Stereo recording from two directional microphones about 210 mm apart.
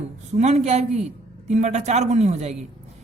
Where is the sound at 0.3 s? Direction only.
30° right (ahead or behind).